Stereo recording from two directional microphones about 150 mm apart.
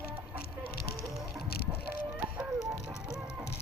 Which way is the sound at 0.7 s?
90° left.